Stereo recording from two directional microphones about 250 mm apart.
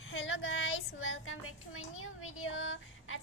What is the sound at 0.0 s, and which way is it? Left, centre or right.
Child singing, left.